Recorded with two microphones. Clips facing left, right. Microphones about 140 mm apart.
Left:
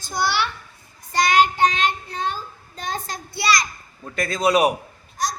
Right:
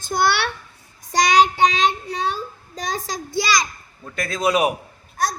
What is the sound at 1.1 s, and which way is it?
Child singing, 90° right.